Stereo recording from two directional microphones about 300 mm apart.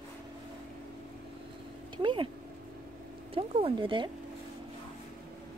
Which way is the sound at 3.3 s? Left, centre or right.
Centre.